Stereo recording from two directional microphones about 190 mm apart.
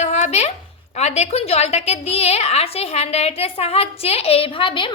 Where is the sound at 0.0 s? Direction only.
35° left (ahead or behind).